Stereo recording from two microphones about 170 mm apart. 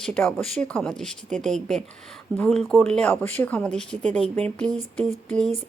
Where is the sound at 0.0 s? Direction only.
5° left (ahead or behind).